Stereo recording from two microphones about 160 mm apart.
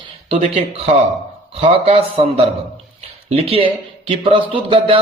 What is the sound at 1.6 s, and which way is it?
Speech, 35° right (ahead or behind).